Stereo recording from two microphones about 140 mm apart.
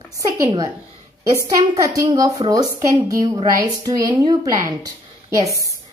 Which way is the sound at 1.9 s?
25° right (ahead or behind).